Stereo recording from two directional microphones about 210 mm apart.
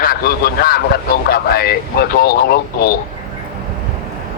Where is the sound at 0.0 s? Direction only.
45° left (ahead or behind).